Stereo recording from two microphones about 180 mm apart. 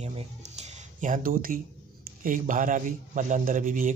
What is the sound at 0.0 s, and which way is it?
Speech, 35° right (ahead or behind).